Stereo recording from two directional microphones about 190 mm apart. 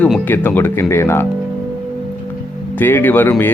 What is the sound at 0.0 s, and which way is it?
Speech, 10° left (ahead or behind).